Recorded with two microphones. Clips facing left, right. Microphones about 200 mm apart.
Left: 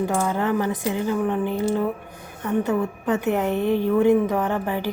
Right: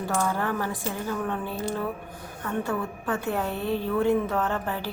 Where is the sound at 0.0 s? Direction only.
20° left (ahead or behind).